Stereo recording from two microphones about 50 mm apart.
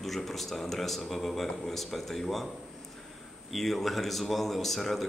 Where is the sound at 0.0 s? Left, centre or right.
Centre.